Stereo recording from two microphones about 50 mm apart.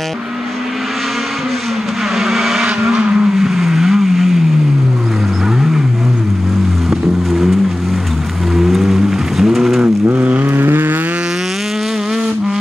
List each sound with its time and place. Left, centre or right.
2.1 s vehicle: centre
2.8 s vehicle: centre
3.3 s vehicle: centre
6.9 s music: centre
8.5 s a sound: centre
10.0 s vehicle: right
10.5 s vehicle: right